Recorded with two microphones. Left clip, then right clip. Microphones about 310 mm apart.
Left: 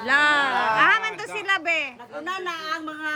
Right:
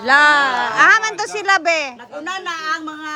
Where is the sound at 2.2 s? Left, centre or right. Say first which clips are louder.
Right 6 dB; right.